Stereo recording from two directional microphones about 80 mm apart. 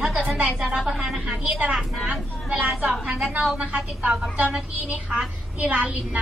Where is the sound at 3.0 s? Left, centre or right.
Centre.